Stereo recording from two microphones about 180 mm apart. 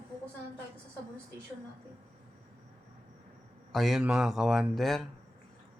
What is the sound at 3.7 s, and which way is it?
Speech, centre (ahead or behind).